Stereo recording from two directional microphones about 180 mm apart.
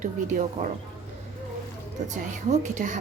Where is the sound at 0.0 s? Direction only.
45° right (ahead or behind).